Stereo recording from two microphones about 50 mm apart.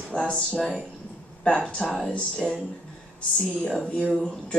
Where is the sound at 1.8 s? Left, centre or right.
Centre.